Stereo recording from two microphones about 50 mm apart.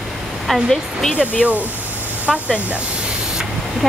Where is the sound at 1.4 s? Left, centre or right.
Right.